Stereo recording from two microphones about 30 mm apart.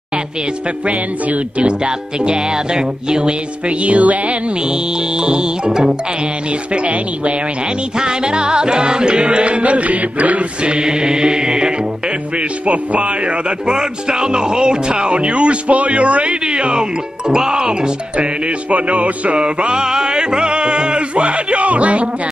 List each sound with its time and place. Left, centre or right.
0.8 s speech: right
1.7 s music: right
3.6 s speech: right
4.6 s music: right
6.7 s speech: right
8.0 s music: right
10.6 s music: right
12.4 s speech: right
13.7 s music: right
16.4 s music: right
17.3 s music: right
18.7 s speech: right
19.3 s music: right